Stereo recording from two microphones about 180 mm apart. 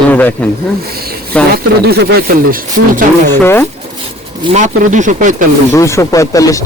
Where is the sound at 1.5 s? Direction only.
60° right (ahead or behind).